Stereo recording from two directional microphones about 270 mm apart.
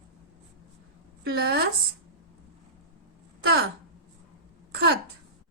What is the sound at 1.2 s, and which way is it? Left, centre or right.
Speech, right.